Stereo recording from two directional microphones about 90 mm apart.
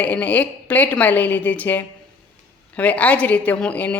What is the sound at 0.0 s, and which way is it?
A woman's voice, 15° left (ahead or behind).